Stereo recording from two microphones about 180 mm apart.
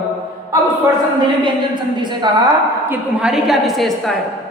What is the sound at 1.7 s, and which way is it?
Speech, 25° right (ahead or behind).